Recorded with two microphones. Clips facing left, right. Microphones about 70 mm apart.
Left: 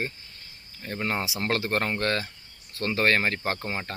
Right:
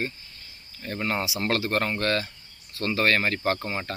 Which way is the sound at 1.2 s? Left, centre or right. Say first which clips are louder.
Right 2 dB; left.